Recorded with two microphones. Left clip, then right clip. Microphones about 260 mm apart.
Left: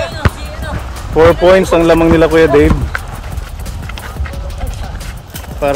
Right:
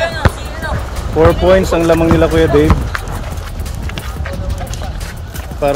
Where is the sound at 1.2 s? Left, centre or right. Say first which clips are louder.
Left 3 dB; centre.